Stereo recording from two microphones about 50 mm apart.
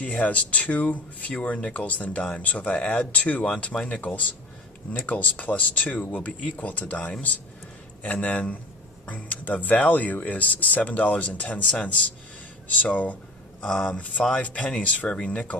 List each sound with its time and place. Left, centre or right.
0.0 s speech: left
13.6 s speech: centre
13.8 s speech: left